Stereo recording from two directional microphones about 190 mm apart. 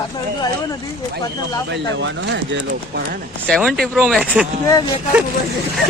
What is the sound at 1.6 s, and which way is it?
Speech, 70° right (ahead or behind).